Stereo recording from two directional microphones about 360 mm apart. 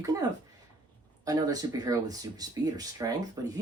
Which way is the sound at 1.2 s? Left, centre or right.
Centre.